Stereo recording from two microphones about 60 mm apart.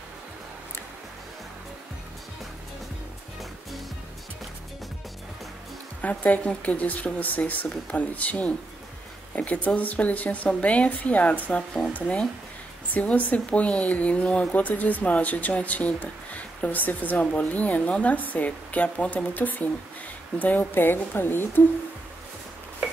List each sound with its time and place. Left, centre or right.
5.9 s speech: left
12.9 s a woman's voice: left